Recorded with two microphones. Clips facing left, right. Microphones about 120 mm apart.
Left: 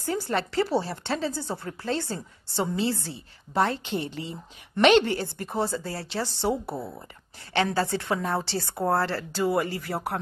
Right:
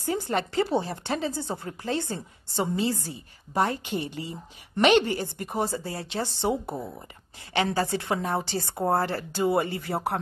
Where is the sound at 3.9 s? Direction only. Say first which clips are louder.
Left 1 dB; 60° left (ahead or behind).